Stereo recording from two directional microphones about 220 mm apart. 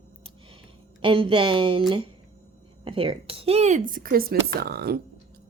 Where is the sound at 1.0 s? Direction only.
25° right (ahead or behind).